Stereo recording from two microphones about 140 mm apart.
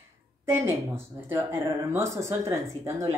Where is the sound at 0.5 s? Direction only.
15° right (ahead or behind).